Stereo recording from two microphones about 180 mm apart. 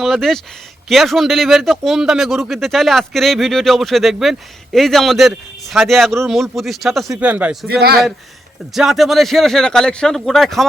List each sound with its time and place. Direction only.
0.0 s speech: centre (ahead or behind)
7.7 s a man's voice: 60° right (ahead or behind)
8.7 s speech: centre (ahead or behind)